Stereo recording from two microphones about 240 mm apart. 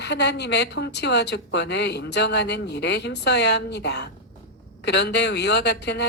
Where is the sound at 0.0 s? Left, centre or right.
Left.